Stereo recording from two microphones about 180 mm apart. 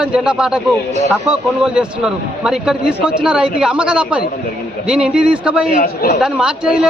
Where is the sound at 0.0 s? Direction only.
5° right (ahead or behind).